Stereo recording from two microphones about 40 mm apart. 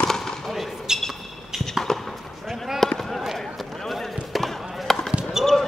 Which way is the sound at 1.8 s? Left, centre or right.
Centre.